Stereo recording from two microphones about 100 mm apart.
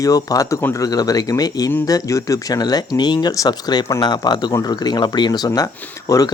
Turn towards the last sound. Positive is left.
turn(degrees=35)  # may be behind; listen again after turning